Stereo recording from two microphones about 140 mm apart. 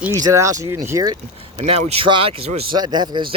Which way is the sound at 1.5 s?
45° right (ahead or behind).